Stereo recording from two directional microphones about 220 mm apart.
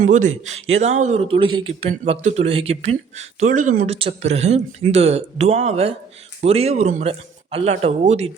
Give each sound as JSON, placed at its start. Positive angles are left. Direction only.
{"t": 0.0, "sound": "speech", "side_deg": -35}